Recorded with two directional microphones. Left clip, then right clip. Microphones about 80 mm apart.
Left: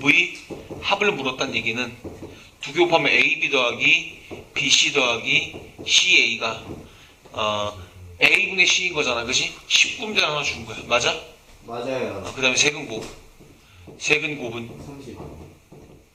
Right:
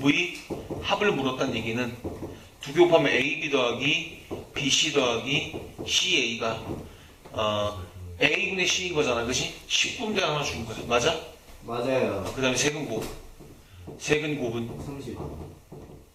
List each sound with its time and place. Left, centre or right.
0.0 s a man's voice: left
12.4 s a man's voice: left
14.0 s a man's voice: left